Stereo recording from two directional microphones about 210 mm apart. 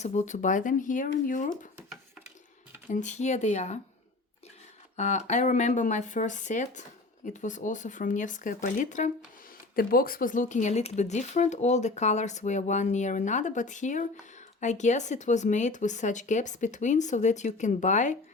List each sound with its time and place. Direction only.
0.0 s speech: 35° left (ahead or behind)
2.8 s speech: 35° left (ahead or behind)
4.9 s speech: 35° left (ahead or behind)